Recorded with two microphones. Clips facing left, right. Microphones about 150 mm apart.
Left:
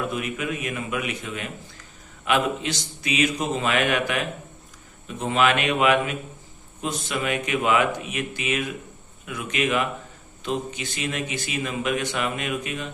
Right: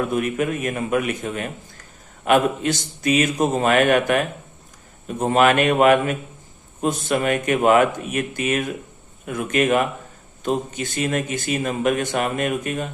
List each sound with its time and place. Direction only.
0.0 s a man's voice: 50° right (ahead or behind)